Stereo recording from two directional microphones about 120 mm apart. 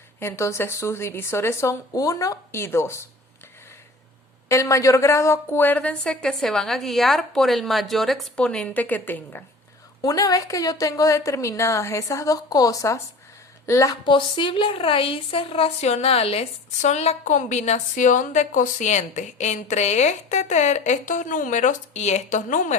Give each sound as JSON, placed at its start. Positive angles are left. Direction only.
{"t": 0.2, "sound": "a woman's voice", "side_deg": 20}
{"t": 4.4, "sound": "a woman's voice", "side_deg": 25}
{"t": 10.0, "sound": "a woman's voice", "side_deg": 30}
{"t": 14.0, "sound": "speech", "side_deg": 45}